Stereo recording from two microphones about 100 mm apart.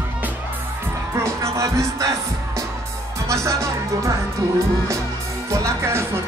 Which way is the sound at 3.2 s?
30° right (ahead or behind).